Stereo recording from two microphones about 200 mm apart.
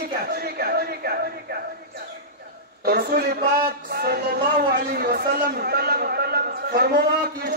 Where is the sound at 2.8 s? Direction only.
50° right (ahead or behind).